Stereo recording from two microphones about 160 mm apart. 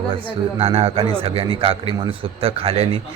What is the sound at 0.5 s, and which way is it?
A man's voice, 40° right (ahead or behind).